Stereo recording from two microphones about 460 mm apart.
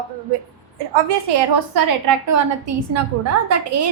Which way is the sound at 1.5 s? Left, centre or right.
Right.